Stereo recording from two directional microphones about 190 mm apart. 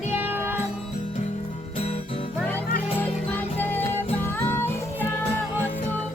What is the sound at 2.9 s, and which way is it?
Music, 10° left (ahead or behind).